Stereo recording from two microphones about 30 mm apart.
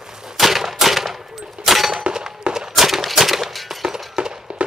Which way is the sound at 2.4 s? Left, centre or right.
Right.